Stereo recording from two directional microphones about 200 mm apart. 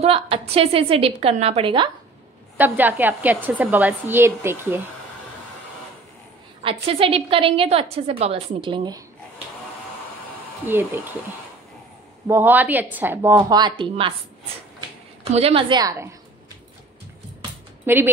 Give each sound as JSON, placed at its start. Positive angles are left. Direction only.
{"t": 0.0, "sound": "a woman's voice", "side_deg": -30}
{"t": 2.5, "sound": "a woman's voice", "side_deg": -10}
{"t": 6.6, "sound": "a woman's voice", "side_deg": -25}
{"t": 10.7, "sound": "a woman's voice", "side_deg": -10}
{"t": 12.3, "sound": "a woman's voice", "side_deg": -10}
{"t": 15.3, "sound": "a woman's voice", "side_deg": -30}
{"t": 17.8, "sound": "a woman's voice", "side_deg": -10}